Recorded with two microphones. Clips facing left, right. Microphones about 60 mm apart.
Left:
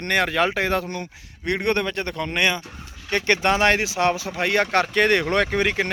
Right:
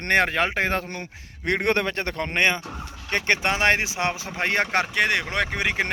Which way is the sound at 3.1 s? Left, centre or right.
Right.